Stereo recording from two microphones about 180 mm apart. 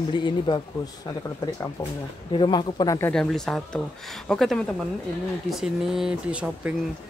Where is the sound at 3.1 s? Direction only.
Centre (ahead or behind).